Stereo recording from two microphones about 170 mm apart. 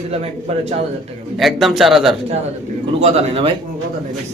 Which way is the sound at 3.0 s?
35° right (ahead or behind).